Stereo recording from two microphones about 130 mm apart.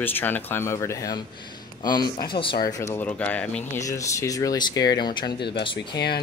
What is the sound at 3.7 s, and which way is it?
Speech, 25° left (ahead or behind).